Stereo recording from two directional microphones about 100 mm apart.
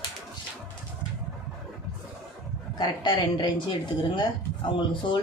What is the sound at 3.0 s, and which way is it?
Speech, 55° left (ahead or behind).